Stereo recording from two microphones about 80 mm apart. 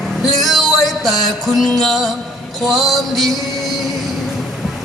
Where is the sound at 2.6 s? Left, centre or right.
Centre.